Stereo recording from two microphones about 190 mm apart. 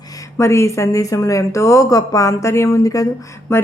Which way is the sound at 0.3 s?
15° left (ahead or behind).